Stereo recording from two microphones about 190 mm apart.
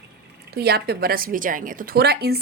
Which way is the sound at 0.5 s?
55° right (ahead or behind).